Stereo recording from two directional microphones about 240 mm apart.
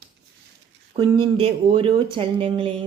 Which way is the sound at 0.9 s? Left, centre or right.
Right.